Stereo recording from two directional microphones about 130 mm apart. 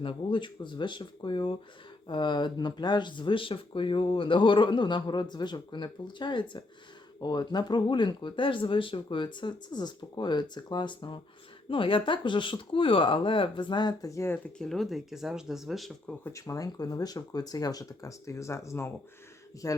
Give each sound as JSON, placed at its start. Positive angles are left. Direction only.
{"t": 0.0, "sound": "speech", "side_deg": 40}
{"t": 16.2, "sound": "speech", "side_deg": 25}